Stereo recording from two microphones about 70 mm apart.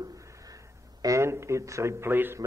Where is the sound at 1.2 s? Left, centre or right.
Right.